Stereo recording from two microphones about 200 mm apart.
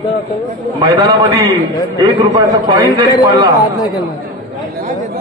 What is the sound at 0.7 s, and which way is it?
A man's voice, 15° right (ahead or behind).